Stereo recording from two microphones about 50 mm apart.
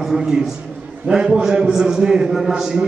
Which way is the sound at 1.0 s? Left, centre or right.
Centre.